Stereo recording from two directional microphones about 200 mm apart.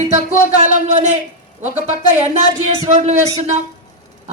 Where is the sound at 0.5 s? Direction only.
35° right (ahead or behind).